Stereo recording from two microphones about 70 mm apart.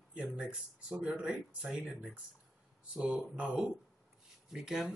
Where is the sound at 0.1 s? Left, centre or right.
Centre.